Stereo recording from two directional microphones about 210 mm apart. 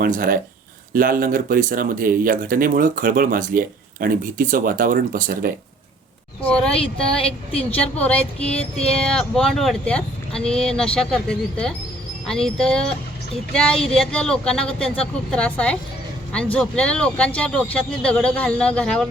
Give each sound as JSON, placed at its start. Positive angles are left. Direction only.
{"t": 0.0, "sound": "speech", "side_deg": -40}
{"t": 6.4, "sound": "speech", "side_deg": 5}